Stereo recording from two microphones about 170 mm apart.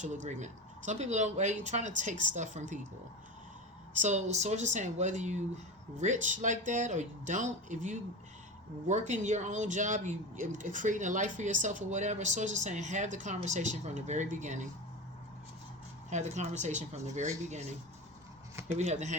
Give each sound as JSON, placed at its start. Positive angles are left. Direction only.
{"t": 0.0, "sound": "speech", "side_deg": -45}
{"t": 4.0, "sound": "speech", "side_deg": -40}
{"t": 16.0, "sound": "speech", "side_deg": -45}
{"t": 18.8, "sound": "speech", "side_deg": -45}